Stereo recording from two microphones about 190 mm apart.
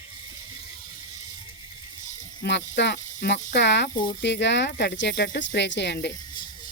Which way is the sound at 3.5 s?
65° left (ahead or behind).